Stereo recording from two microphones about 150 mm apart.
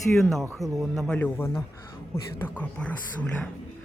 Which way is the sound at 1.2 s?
10° left (ahead or behind).